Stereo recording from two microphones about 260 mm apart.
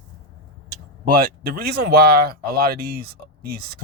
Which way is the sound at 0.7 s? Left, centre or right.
Right.